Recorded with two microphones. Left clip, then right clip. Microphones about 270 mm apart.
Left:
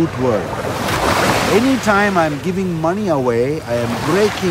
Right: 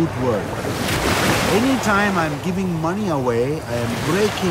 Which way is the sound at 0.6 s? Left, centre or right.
Centre.